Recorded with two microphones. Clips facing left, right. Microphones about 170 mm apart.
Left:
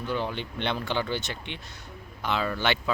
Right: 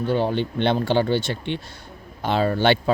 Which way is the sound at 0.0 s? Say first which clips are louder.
Right 9 dB; 30° right (ahead or behind).